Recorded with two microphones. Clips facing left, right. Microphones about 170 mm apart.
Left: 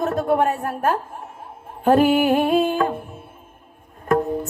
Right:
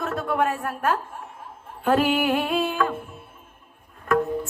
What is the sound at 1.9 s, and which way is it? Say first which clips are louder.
Music: left 5 dB; 40° left (ahead or behind).